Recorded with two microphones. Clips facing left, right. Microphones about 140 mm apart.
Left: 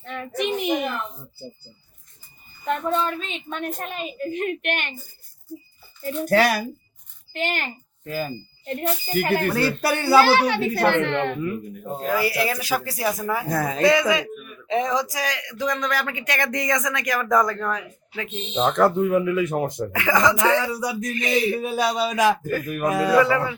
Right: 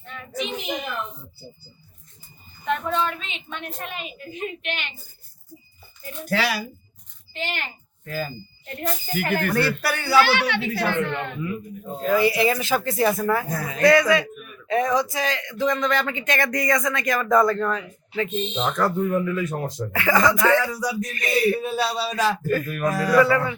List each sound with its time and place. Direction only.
0.1 s a sound: 60° left (ahead or behind)
2.6 s a woman's voice: 40° left (ahead or behind)
4.3 s a woman's voice: 60° left (ahead or behind)
6.2 s speech: 50° left (ahead or behind)
8.0 s a woman's voice: 20° left (ahead or behind)
9.6 s speech: 20° left (ahead or behind)
10.2 s a woman's voice: 35° left (ahead or behind)
10.8 s speech: 65° left (ahead or behind)
12.0 s speech: 5° left (ahead or behind)
13.8 s speech: 20° left (ahead or behind)
18.5 s speech: 25° left (ahead or behind)
18.9 s speech: 10° left (ahead or behind)
19.5 s speech: 20° left (ahead or behind)